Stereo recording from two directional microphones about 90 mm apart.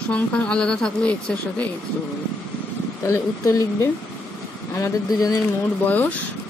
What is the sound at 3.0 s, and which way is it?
Speech, 35° left (ahead or behind).